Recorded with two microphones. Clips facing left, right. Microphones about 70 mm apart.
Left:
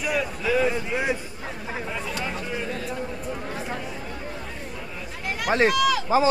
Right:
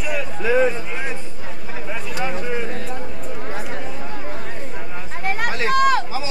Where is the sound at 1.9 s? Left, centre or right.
Centre.